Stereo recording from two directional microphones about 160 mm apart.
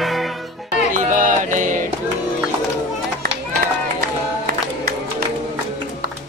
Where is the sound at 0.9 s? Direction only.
55° right (ahead or behind).